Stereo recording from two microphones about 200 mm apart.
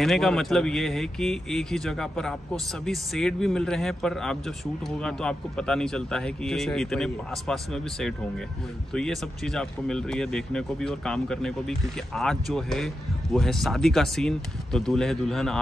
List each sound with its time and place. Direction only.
0.0 s speech: centre (ahead or behind)